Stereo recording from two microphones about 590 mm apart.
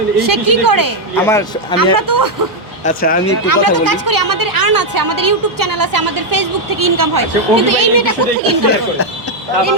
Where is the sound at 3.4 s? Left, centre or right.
Right.